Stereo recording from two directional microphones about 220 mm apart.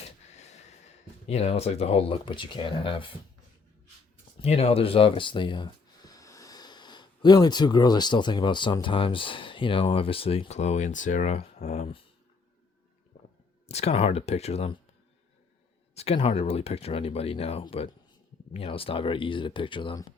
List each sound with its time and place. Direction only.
0.3 s a sound: 30° left (ahead or behind)
1.3 s speech: 30° left (ahead or behind)
4.4 s speech: 30° left (ahead or behind)
13.7 s speech: 30° left (ahead or behind)
16.0 s speech: 25° left (ahead or behind)